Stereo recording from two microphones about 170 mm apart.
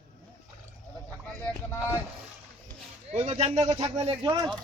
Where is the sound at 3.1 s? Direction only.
40° right (ahead or behind).